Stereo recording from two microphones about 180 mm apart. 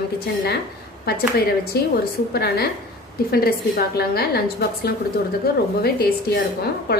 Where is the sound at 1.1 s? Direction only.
60° left (ahead or behind).